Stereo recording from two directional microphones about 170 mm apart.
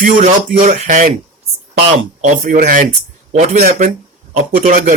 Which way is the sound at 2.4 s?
50° right (ahead or behind).